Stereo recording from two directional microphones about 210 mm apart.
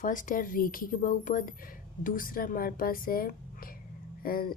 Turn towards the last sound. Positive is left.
turn(degrees=45)  # may be behind; listen again after turning